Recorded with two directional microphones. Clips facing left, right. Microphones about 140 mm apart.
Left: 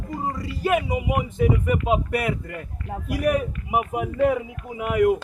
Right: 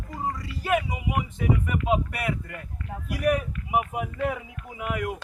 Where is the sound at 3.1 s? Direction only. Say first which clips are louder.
Left 2 dB; 10° left (ahead or behind).